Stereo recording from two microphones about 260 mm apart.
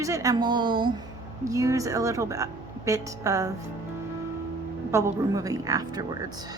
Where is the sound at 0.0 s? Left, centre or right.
Centre.